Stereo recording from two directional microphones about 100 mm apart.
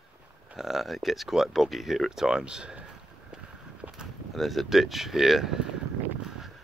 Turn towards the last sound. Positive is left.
turn(degrees=-5)  # may be behind; listen again after turning